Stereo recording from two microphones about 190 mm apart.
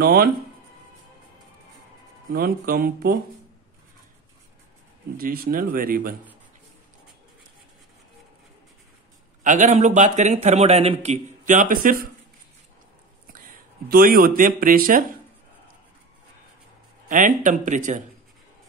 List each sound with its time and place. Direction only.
0.0 s speech: 55° right (ahead or behind)
2.3 s speech: 50° right (ahead or behind)
5.1 s speech: 50° right (ahead or behind)
9.4 s a man's voice: 40° right (ahead or behind)
13.8 s speech: 50° right (ahead or behind)
17.1 s a man's voice: 45° right (ahead or behind)